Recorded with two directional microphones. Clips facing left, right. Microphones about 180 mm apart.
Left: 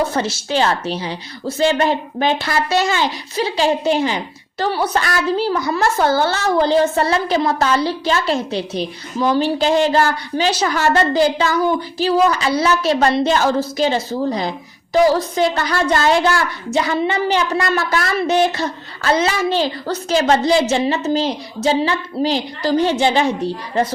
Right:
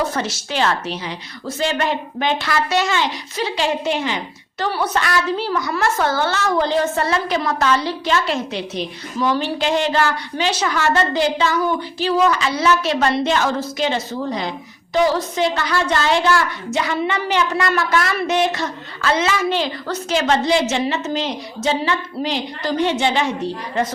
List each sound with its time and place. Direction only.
0.1 s a child's voice: 30° left (ahead or behind)